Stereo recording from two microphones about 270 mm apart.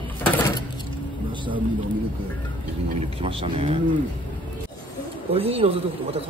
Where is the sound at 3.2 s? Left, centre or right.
Right.